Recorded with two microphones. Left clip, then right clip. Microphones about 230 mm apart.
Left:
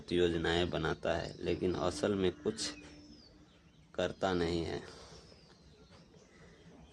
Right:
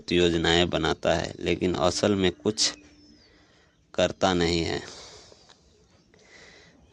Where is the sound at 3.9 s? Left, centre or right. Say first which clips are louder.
Right 10 dB; right.